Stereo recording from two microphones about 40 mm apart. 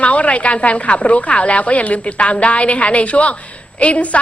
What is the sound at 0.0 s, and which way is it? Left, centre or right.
Speech, left.